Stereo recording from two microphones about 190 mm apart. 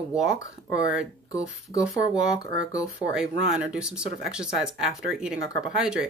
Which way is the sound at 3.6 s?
5° right (ahead or behind).